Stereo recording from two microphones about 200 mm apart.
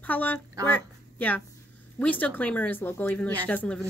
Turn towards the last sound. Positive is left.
turn(degrees=5)  # may be behind; listen again after turning